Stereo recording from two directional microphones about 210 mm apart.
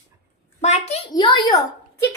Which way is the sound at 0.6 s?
30° left (ahead or behind).